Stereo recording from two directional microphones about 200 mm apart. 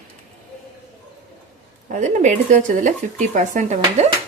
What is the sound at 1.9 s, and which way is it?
Speech, 35° right (ahead or behind).